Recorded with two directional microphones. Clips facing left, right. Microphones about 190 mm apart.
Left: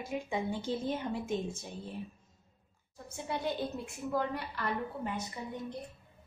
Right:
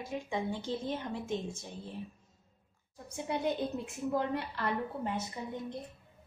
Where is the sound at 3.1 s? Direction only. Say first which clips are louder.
Right 2 dB; 20° right (ahead or behind).